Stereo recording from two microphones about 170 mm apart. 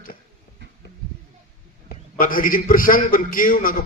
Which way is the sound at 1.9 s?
55° left (ahead or behind).